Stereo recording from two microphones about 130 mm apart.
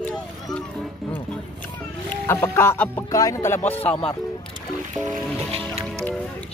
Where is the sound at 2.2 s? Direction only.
15° left (ahead or behind).